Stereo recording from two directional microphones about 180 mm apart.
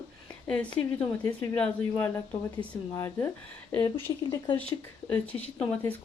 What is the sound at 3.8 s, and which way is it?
Speech, 25° left (ahead or behind).